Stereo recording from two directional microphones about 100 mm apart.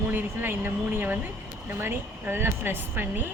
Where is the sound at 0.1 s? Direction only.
20° right (ahead or behind).